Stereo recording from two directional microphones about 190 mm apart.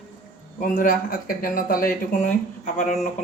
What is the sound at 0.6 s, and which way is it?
Speech, 45° left (ahead or behind).